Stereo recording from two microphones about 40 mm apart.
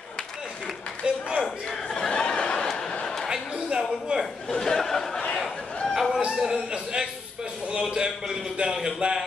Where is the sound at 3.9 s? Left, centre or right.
Centre.